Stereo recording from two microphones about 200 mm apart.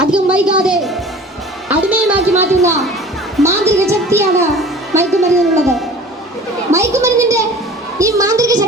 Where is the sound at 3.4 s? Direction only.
Centre (ahead or behind).